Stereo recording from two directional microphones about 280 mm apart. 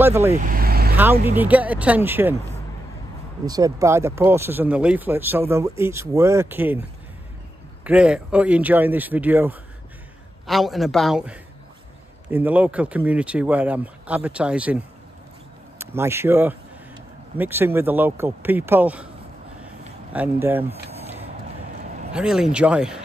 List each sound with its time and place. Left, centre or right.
0.0 s speech: centre
0.3 s vehicle: right
1.2 s speech: centre
3.4 s speech: centre
7.8 s speech: centre
15.8 s speech: centre
20.1 s speech: centre
22.1 s speech: centre